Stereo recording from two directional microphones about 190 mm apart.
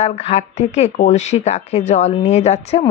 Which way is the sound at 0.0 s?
35° left (ahead or behind).